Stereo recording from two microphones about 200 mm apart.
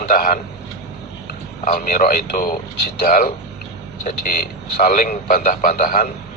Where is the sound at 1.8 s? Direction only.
45° left (ahead or behind).